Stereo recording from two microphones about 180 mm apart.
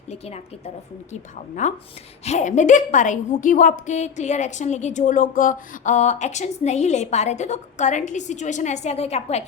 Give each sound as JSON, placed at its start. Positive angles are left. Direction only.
{"t": 0.1, "sound": "a woman's voice", "side_deg": 35}